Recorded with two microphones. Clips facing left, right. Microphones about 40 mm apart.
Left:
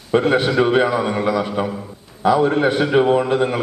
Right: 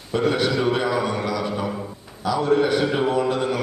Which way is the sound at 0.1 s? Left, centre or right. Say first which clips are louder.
Left 5 dB; left.